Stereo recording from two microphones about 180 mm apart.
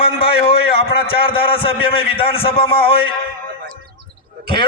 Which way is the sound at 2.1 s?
30° left (ahead or behind).